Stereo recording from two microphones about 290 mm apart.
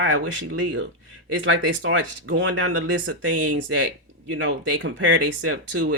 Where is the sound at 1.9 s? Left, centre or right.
Right.